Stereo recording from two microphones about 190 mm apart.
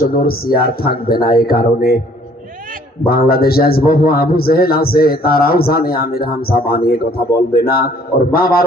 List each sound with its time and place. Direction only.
0.0 s a man's voice: 50° left (ahead or behind)
3.1 s a man's voice: 55° left (ahead or behind)